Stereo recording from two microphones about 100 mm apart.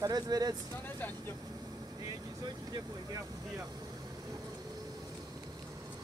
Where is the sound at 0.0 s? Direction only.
40° right (ahead or behind).